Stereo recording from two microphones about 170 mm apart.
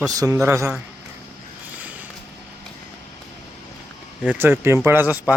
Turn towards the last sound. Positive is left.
turn(degrees=-10)  # may be behind; listen again after turning